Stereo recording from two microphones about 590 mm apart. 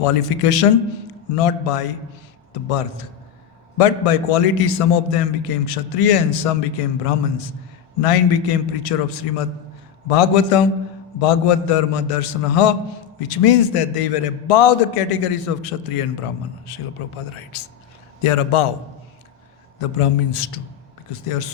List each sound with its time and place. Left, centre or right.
0.0 s a man's voice: left
19.8 s a man's voice: left